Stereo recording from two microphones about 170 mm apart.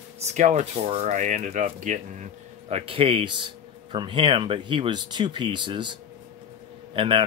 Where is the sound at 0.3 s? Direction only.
40° right (ahead or behind).